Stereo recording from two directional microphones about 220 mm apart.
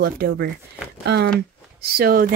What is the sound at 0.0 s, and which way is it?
A woman's voice, 45° right (ahead or behind).